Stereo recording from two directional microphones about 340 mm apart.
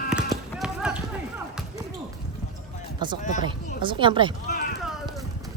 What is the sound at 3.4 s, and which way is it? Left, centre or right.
Speech, centre.